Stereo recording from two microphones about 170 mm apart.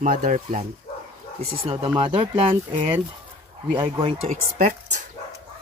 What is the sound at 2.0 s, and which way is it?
Speech, 30° right (ahead or behind).